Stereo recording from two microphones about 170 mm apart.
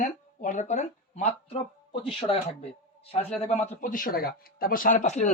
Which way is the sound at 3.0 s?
40° left (ahead or behind).